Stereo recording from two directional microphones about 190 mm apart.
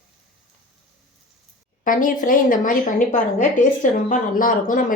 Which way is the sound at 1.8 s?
45° left (ahead or behind).